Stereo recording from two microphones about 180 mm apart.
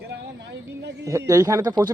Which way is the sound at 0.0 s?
70° right (ahead or behind).